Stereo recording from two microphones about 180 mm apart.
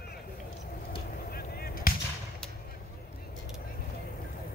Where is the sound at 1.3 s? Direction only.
55° left (ahead or behind).